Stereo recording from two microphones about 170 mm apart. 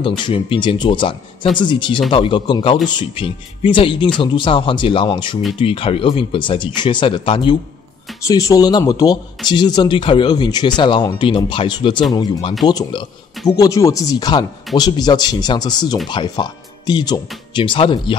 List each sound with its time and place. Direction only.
0.0 s speech: 30° left (ahead or behind)
8.2 s speech: 20° left (ahead or behind)